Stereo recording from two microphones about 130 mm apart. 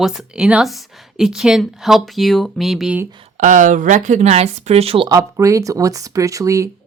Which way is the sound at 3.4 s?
75° right (ahead or behind).